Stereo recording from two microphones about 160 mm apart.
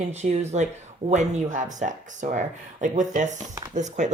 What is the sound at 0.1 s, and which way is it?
A woman's voice, 45° right (ahead or behind).